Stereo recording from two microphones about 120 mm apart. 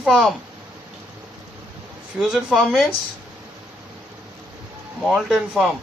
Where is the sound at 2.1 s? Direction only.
5° right (ahead or behind).